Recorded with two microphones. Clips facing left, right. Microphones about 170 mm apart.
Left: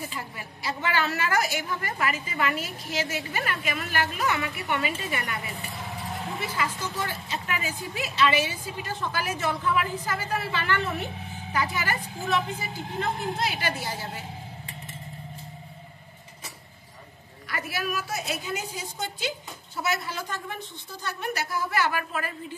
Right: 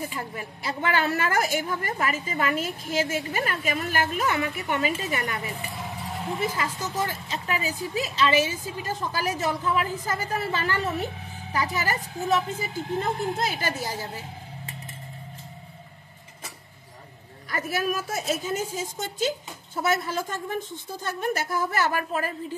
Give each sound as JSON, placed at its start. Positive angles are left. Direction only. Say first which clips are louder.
{"t": 0.4, "sound": "a woman's voice", "louder": "right 1 dB", "side_deg": -50}
{"t": 6.6, "sound": "a woman's voice", "louder": "right 2 dB", "side_deg": -40}
{"t": 17.5, "sound": "a woman's voice", "louder": "right 4 dB", "side_deg": -45}